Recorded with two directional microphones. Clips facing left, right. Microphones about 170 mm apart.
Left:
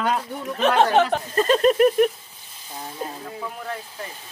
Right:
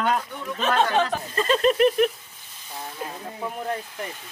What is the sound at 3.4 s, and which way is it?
Speech, 25° right (ahead or behind).